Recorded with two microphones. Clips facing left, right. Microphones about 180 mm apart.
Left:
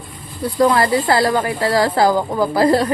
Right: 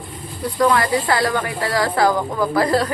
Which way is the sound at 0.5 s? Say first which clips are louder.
Left 3 dB; 30° left (ahead or behind).